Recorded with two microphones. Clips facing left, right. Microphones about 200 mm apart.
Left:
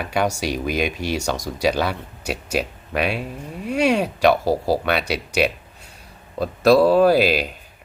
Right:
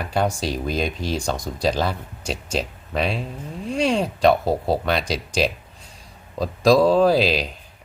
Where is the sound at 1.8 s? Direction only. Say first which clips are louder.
Left 1 dB; 65° left (ahead or behind).